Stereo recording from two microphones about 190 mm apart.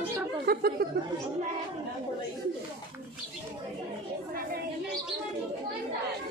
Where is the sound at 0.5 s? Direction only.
55° right (ahead or behind).